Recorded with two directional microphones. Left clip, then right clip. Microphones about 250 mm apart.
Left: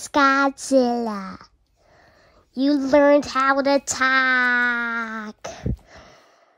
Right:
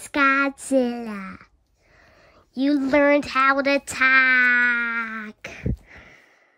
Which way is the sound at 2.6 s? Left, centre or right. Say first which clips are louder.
Left 2 dB; centre.